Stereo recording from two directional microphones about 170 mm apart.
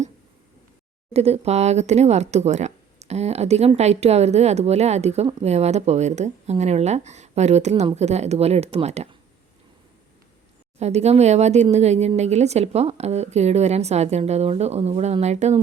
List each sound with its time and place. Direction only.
1.1 s speech: 35° right (ahead or behind)
10.8 s speech: 40° right (ahead or behind)